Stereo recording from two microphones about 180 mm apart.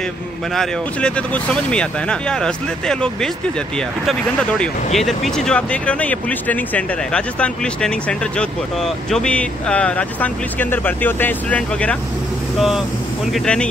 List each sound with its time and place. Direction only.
0.6 s speech: 5° left (ahead or behind)